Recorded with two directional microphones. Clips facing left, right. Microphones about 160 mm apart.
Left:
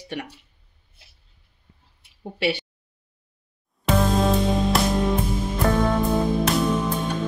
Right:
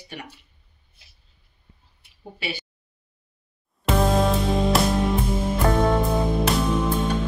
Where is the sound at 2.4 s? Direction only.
75° left (ahead or behind).